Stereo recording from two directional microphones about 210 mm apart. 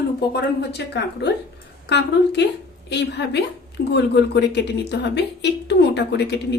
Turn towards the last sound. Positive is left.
turn(degrees=55)  # may be behind; listen again after turning